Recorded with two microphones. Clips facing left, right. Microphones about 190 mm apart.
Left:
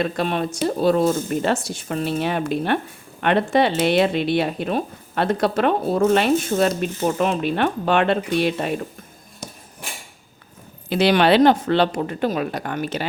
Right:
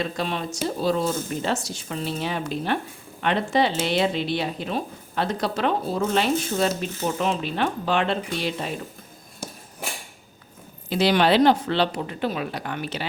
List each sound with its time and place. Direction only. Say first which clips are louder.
0.0 s speech: left 5 dB; 55° left (ahead or behind)
10.8 s speech: left 3 dB; 65° left (ahead or behind); by 13.1 s 45° left (ahead or behind)